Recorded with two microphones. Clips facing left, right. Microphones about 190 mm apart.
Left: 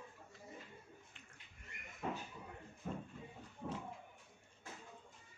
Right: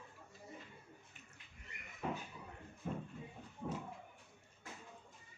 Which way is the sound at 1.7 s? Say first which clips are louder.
Left 1 dB; 50° left (ahead or behind).